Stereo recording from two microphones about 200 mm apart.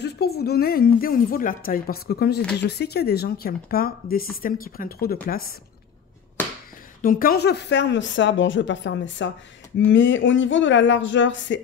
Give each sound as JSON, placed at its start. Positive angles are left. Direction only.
{"t": 0.0, "sound": "speech", "side_deg": 50}
{"t": 6.4, "sound": "a sound", "side_deg": 10}
{"t": 7.0, "sound": "a man's voice", "side_deg": 45}